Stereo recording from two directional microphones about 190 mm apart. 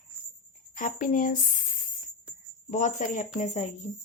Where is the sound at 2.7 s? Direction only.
40° left (ahead or behind).